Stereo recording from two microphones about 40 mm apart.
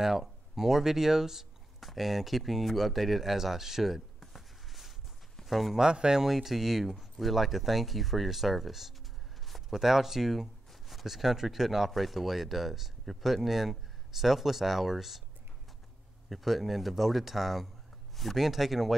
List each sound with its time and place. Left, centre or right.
0.0 s a man's voice: centre
5.8 s speech: centre
6.2 s speech: centre
16.3 s speech: centre